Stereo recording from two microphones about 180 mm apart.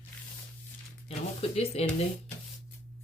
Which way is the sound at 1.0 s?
35° left (ahead or behind).